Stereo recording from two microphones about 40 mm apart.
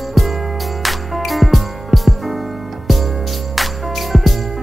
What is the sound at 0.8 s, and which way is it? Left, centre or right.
Music, centre.